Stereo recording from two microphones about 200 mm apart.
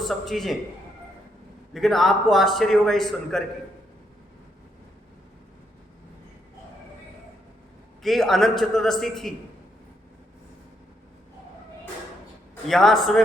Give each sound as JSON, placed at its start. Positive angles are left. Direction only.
{"t": 0.0, "sound": "a man's voice", "side_deg": 0}
{"t": 1.7, "sound": "a man's voice", "side_deg": 0}
{"t": 8.0, "sound": "a man's voice", "side_deg": 0}
{"t": 12.6, "sound": "a man's voice", "side_deg": 0}